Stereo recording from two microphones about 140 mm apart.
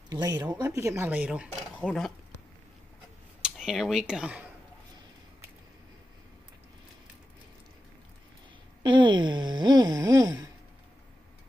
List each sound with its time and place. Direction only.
0.1 s speech: 25° right (ahead or behind); by 2.1 s centre (ahead or behind)
3.4 s speech: 5° right (ahead or behind)
8.8 s a sound: 35° right (ahead or behind)